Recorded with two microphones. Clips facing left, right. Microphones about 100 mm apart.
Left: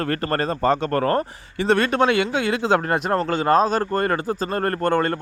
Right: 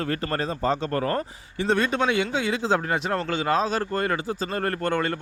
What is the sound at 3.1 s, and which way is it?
Speech, 40° left (ahead or behind).